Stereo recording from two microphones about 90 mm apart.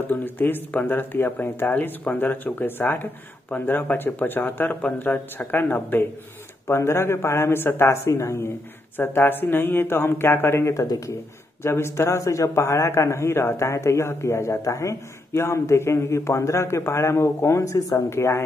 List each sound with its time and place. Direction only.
0.1 s a man's voice: 20° left (ahead or behind)